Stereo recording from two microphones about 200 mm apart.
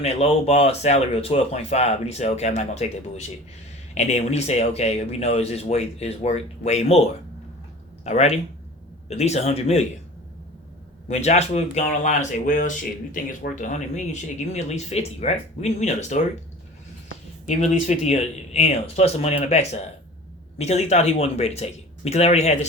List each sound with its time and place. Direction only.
0.0 s speech: 30° left (ahead or behind)
3.9 s speech: 35° left (ahead or behind)
8.0 s speech: 35° left (ahead or behind)
11.1 s speech: 35° left (ahead or behind)
17.4 s speech: 35° left (ahead or behind)